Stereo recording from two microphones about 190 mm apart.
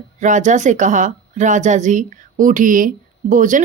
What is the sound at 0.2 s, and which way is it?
Speech, 40° right (ahead or behind).